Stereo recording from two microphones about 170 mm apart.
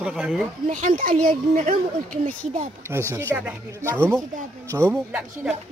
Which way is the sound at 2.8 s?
15° right (ahead or behind).